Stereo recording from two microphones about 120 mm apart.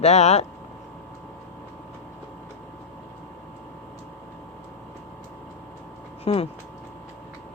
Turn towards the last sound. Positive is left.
turn(degrees=50)  # may be behind; listen again after turning